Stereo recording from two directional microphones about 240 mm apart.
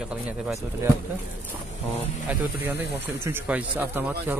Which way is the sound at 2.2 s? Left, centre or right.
Centre.